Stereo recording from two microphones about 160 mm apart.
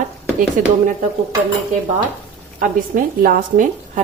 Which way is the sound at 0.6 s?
55° right (ahead or behind).